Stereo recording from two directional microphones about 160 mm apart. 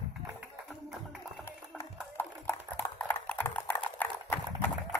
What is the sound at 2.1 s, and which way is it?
Typing, 15° left (ahead or behind).